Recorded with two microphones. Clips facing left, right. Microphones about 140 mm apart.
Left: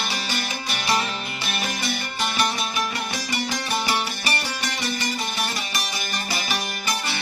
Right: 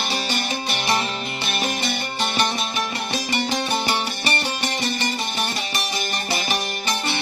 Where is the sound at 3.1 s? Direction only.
25° right (ahead or behind).